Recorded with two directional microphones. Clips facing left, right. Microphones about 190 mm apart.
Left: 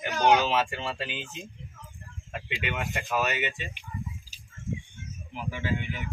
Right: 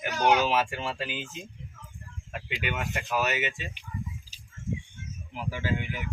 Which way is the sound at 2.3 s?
5° right (ahead or behind).